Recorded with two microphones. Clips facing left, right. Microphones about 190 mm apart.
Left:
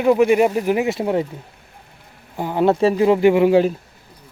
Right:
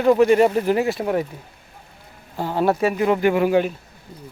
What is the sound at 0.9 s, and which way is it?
Speech, 25° left (ahead or behind).